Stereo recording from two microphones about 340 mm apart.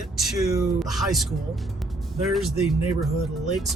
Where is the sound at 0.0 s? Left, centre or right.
Centre.